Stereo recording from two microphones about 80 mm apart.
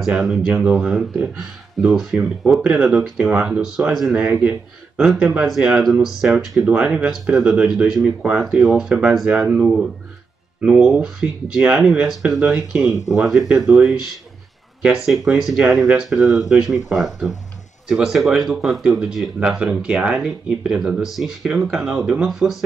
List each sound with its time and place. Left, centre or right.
0.2 s speech: centre
4.1 s speech: centre
5.0 s speech: centre
6.7 s speech: centre
17.8 s speech: centre
21.5 s speech: centre